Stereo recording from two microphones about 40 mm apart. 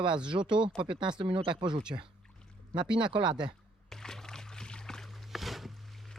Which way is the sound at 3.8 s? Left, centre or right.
Centre.